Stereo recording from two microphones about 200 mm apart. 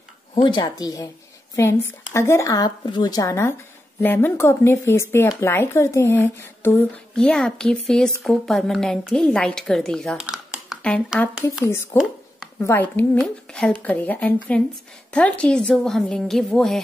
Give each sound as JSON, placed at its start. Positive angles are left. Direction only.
{"t": 0.3, "sound": "a woman's voice", "side_deg": 25}
{"t": 11.6, "sound": "speech", "side_deg": 10}